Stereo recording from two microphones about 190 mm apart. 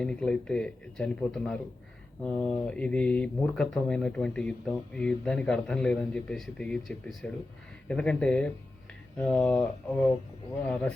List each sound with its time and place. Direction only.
0.0 s speech: 5° left (ahead or behind)